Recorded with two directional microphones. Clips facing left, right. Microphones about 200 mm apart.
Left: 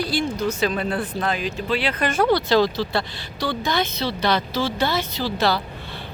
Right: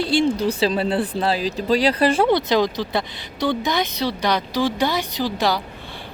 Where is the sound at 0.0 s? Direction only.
25° right (ahead or behind).